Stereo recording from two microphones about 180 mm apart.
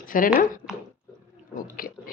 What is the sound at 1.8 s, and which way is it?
Speech, 50° left (ahead or behind).